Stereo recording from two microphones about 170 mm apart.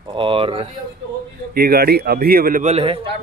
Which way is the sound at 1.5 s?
65° right (ahead or behind).